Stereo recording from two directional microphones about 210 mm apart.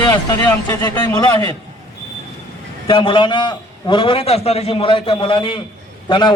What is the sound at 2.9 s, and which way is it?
A man's voice, 25° left (ahead or behind).